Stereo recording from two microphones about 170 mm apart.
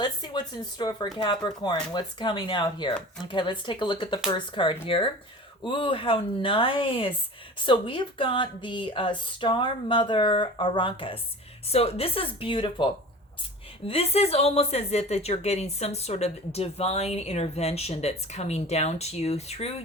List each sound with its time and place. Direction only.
0.0 s a woman's voice: 25° left (ahead or behind)